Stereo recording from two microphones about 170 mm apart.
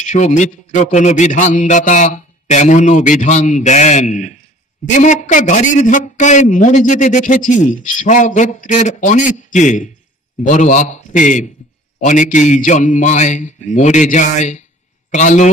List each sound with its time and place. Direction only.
0.0 s a man's voice: 45° left (ahead or behind)